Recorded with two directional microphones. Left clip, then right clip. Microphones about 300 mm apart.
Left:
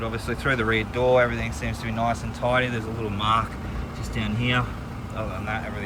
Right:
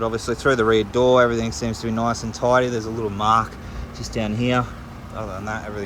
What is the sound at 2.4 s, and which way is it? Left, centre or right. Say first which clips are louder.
Speech: right 6 dB; right.